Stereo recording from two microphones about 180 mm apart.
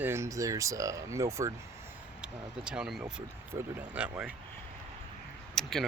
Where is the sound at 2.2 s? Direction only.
5° right (ahead or behind).